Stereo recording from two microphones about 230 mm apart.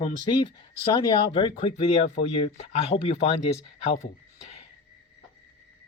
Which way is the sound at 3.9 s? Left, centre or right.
Left.